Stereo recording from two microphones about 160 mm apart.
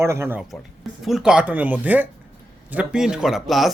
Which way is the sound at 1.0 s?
5° right (ahead or behind).